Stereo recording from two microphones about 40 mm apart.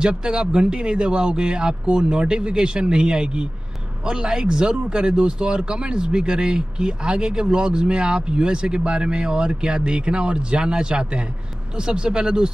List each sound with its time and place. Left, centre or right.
0.0 s speech: right